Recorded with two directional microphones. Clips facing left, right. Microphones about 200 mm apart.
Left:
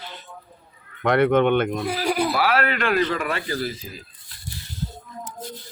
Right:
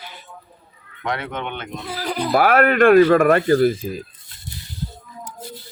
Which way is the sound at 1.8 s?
15° left (ahead or behind).